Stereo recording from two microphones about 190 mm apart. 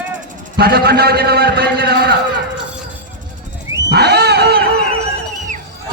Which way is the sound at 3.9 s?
60° right (ahead or behind).